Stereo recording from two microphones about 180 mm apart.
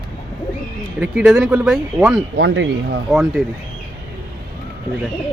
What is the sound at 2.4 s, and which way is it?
Speech, 65° right (ahead or behind).